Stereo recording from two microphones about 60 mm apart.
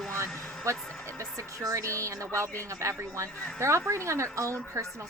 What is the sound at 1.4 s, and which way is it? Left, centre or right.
A woman's voice, right.